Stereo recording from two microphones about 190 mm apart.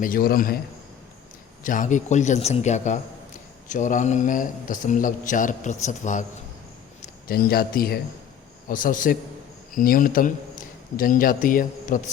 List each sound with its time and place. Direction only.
0.0 s speech: 50° left (ahead or behind)
1.6 s a man's voice: 45° left (ahead or behind)
7.3 s a man's voice: 50° left (ahead or behind)